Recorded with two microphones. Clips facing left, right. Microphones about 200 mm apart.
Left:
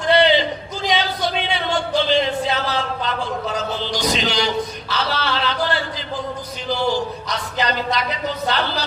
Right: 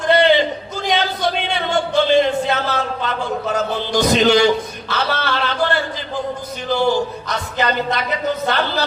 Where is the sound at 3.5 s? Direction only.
50° right (ahead or behind).